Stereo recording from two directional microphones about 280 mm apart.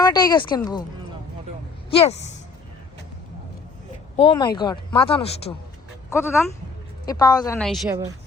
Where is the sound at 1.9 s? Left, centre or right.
Left.